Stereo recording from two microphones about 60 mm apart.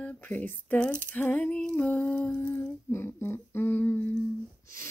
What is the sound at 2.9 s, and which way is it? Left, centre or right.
Humming, left.